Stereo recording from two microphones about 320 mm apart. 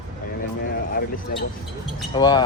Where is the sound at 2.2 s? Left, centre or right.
Centre.